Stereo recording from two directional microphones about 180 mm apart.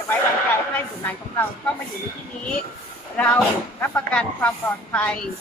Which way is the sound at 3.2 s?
10° left (ahead or behind).